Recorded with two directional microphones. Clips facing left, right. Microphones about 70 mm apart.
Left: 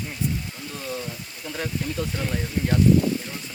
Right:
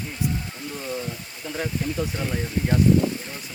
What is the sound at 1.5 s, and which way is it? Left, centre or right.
Speech, centre.